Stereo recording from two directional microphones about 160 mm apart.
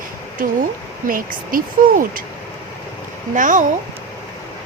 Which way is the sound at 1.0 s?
60° right (ahead or behind).